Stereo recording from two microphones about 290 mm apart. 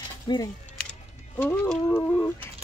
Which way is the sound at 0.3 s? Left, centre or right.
Centre.